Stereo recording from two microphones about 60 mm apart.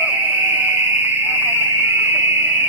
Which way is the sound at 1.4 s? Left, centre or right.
Right.